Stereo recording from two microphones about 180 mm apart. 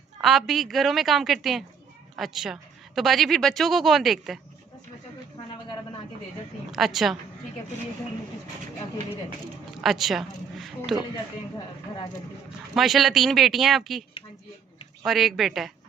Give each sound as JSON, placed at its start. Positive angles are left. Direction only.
{"t": 0.2, "sound": "a woman's voice", "side_deg": 0}
{"t": 6.7, "sound": "a woman's voice", "side_deg": 0}
{"t": 9.8, "sound": "a woman's voice", "side_deg": 0}
{"t": 12.7, "sound": "a woman's voice", "side_deg": 0}
{"t": 15.0, "sound": "a woman's voice", "side_deg": 0}